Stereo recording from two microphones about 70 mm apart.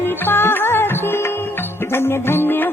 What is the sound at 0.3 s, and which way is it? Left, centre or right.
Music, left.